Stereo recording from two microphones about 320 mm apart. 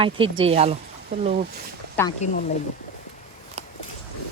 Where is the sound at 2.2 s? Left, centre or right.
Left.